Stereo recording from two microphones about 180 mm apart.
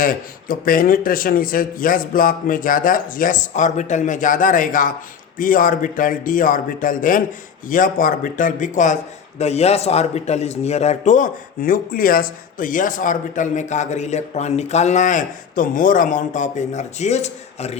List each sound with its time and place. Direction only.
0.0 s a man's voice: 50° left (ahead or behind)